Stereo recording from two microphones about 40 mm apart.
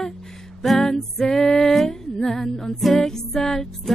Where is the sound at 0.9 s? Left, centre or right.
Centre.